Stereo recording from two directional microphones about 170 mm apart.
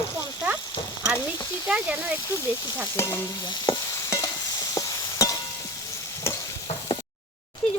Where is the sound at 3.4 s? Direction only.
25° left (ahead or behind).